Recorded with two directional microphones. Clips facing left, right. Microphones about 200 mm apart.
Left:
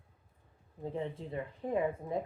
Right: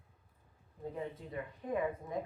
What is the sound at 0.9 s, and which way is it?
Speech, 30° left (ahead or behind).